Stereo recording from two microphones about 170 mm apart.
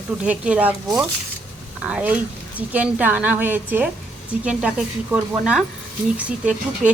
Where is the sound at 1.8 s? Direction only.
5° right (ahead or behind).